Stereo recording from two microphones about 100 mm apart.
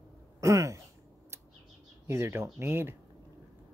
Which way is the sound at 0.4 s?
30° right (ahead or behind).